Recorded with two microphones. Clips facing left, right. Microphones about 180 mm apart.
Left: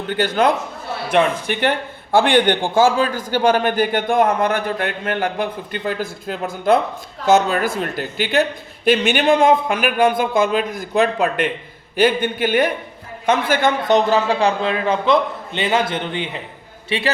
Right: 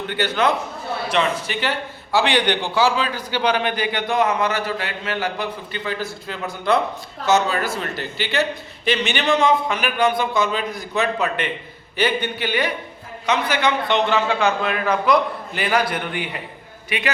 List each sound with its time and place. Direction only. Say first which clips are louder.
1.1 s a man's voice: left 5 dB; 55° left (ahead or behind); by 17.1 s 30° left (ahead or behind)